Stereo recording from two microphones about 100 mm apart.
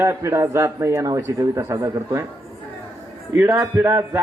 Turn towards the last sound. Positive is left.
turn(degrees=-25)  # may be behind; listen again after turning